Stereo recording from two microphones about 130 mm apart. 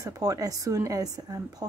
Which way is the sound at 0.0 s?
25° right (ahead or behind).